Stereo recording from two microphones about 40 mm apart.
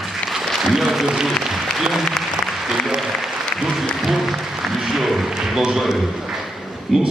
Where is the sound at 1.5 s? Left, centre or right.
Centre.